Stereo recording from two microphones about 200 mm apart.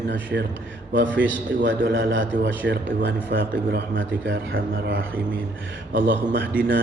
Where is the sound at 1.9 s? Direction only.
70° right (ahead or behind).